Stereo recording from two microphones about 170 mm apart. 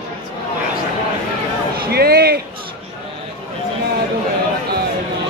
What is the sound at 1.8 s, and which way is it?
Speech, 65° right (ahead or behind).